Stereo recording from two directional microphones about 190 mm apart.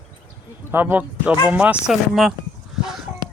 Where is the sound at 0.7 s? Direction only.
10° right (ahead or behind).